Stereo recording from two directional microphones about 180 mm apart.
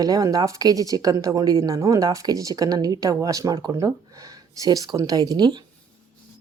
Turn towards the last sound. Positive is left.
turn(degrees=-25)  # may be behind; listen again after turning